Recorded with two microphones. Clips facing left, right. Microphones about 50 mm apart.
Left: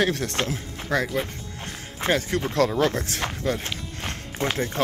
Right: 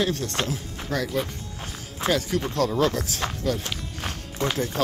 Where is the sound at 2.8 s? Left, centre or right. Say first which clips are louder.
Even; left.